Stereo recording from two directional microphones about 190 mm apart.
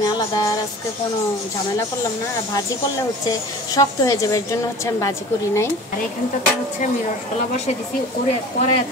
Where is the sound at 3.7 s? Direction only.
20° left (ahead or behind).